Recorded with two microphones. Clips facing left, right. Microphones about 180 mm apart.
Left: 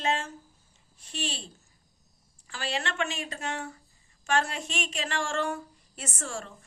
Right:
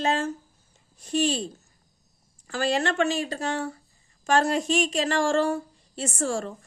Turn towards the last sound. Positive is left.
turn(degrees=-35)  # may be behind; listen again after turning